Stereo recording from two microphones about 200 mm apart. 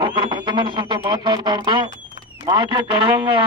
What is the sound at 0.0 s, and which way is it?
A man's voice, 25° right (ahead or behind).